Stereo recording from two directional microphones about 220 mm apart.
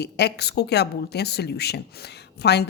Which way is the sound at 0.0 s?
50° left (ahead or behind).